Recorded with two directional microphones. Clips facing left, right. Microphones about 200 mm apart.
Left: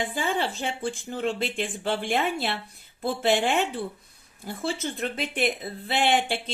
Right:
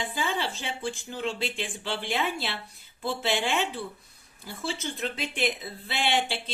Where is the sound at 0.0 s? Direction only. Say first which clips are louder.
Left 3 dB; 50° left (ahead or behind).